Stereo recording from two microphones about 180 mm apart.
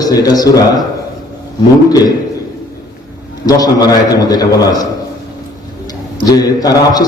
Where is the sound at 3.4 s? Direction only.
20° left (ahead or behind).